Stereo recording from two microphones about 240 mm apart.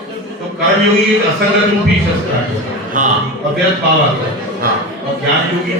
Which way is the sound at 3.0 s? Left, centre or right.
Right.